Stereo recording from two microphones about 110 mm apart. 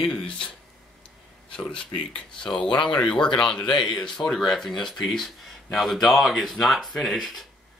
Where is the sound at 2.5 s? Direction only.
45° left (ahead or behind).